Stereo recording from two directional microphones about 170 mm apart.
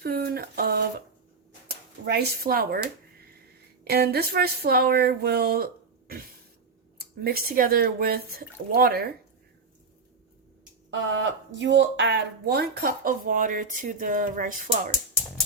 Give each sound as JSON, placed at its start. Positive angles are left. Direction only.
{"t": 0.0, "sound": "speech", "side_deg": -65}
{"t": 3.8, "sound": "a woman's voice", "side_deg": -65}
{"t": 11.1, "sound": "speech", "side_deg": -90}